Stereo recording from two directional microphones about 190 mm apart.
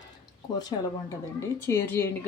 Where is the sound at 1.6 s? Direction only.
15° left (ahead or behind).